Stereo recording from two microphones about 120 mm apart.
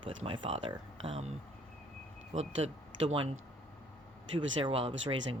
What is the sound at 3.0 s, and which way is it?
Speech, 50° right (ahead or behind).